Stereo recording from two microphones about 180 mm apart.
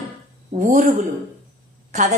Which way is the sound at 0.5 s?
45° right (ahead or behind).